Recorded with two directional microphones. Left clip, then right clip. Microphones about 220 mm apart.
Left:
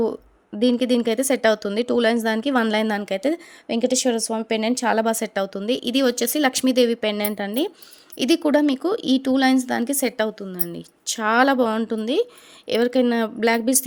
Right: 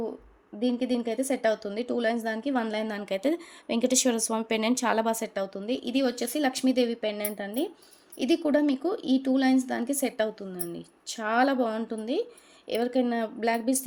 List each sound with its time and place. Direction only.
0.6 s speech: 40° left (ahead or behind)